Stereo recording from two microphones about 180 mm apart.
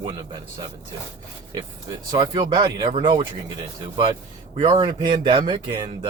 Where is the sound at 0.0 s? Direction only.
25° right (ahead or behind).